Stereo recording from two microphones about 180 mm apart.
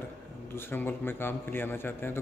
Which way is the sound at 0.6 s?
10° left (ahead or behind).